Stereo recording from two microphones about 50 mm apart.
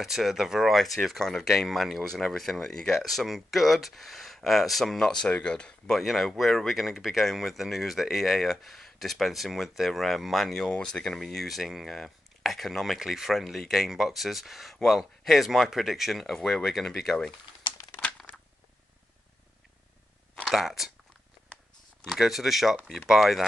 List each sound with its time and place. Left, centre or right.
0.0 s speech: centre
5.9 s speech: centre
10.7 s speech: centre
11.2 s speech: centre
20.4 s speech: centre
22.0 s speech: centre